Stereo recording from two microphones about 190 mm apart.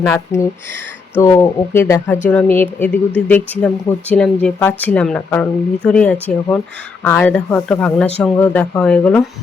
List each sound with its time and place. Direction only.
0.0 s speech: 15° left (ahead or behind)